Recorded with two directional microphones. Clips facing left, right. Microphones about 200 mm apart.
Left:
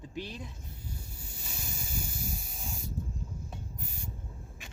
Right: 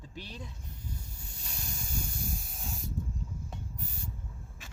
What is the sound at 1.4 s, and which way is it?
Spray, 5° left (ahead or behind).